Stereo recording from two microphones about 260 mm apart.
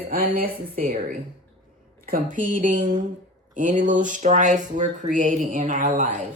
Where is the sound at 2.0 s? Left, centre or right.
Right.